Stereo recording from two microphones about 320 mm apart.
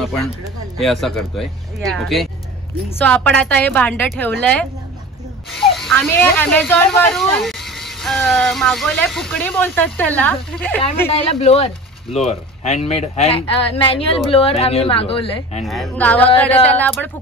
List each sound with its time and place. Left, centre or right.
0.7 s speech: centre
11.1 s a woman's voice: centre
15.6 s speech: centre